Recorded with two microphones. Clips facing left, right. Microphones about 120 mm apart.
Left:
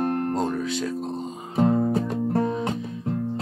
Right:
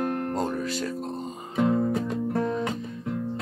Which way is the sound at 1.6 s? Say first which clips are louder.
Left 2 dB; 35° left (ahead or behind).